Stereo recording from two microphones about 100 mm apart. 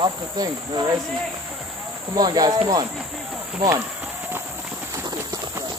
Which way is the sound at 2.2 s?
40° right (ahead or behind).